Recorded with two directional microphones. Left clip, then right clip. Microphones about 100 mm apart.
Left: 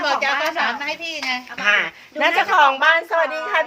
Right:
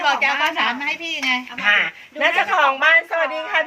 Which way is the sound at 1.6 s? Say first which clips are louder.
Even; 35° left (ahead or behind).